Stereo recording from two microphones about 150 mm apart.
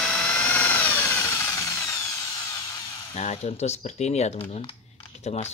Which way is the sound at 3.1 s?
45° left (ahead or behind).